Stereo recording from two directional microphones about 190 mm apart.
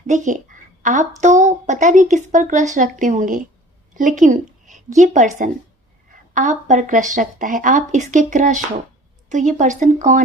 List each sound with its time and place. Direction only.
0.1 s a woman's voice: 40° right (ahead or behind)